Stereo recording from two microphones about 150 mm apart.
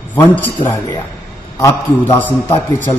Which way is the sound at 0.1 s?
10° left (ahead or behind).